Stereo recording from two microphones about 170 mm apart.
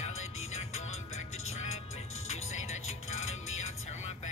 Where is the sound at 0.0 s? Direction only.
40° left (ahead or behind).